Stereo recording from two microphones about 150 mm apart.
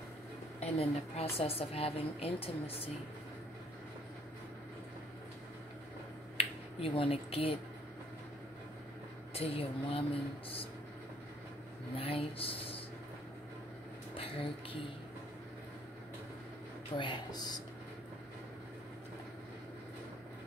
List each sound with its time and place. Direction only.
0.6 s a woman's voice: 40° left (ahead or behind)
6.3 s finger snapping: 40° left (ahead or behind)
9.3 s a woman's voice: 40° left (ahead or behind)
12.0 s a woman's voice: 40° left (ahead or behind)
14.1 s speech: 35° left (ahead or behind)
16.9 s speech: 30° left (ahead or behind)